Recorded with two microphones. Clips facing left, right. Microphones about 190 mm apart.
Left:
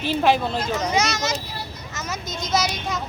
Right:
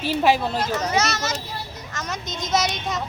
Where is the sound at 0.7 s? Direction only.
10° left (ahead or behind).